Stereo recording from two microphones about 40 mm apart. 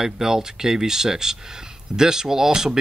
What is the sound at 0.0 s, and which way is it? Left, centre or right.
Speech, centre.